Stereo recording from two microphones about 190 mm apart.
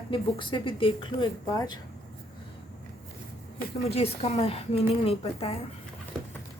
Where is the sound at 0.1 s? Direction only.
25° left (ahead or behind).